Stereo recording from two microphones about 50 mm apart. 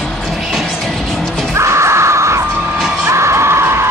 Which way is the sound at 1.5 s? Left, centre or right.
Right.